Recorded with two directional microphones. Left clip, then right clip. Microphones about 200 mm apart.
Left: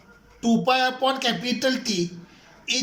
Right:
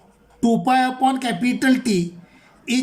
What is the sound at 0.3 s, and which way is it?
Speech, 45° right (ahead or behind).